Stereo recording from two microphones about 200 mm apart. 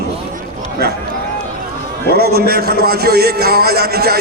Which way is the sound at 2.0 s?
50° right (ahead or behind).